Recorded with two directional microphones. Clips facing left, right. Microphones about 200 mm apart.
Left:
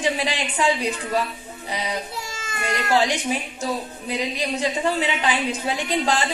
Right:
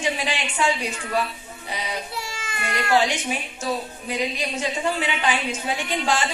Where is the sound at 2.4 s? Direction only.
40° left (ahead or behind).